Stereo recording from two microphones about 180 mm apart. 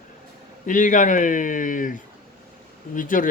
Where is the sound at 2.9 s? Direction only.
45° left (ahead or behind).